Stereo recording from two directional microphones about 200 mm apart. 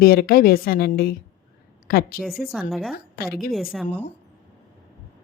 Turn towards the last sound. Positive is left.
turn(degrees=5)  # may be behind; listen again after turning